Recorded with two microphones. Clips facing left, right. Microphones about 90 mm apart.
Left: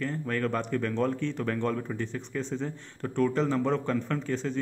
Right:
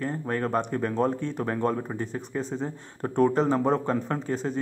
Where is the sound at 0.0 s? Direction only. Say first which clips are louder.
Right 2 dB; 25° right (ahead or behind).